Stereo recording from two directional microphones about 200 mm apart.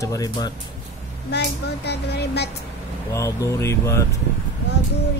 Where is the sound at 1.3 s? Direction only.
55° left (ahead or behind).